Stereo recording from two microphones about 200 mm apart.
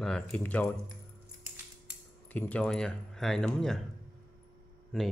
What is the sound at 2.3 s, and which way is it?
Speech, 5° left (ahead or behind).